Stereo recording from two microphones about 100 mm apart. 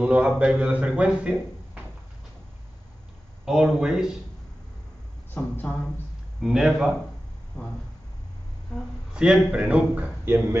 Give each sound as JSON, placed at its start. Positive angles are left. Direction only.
{"t": 0.0, "sound": "a man's voice", "side_deg": -10}
{"t": 3.4, "sound": "speech", "side_deg": -5}
{"t": 5.3, "sound": "speech", "side_deg": 20}
{"t": 6.4, "sound": "speech", "side_deg": -5}
{"t": 7.5, "sound": "speech", "side_deg": 15}
{"t": 9.1, "sound": "a man's voice", "side_deg": -10}